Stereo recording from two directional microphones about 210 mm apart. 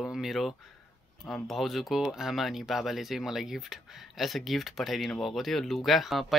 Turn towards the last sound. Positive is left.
turn(degrees=0)  # may be behind; listen again after turning